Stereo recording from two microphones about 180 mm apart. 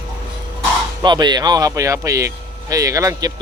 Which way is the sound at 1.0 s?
25° right (ahead or behind).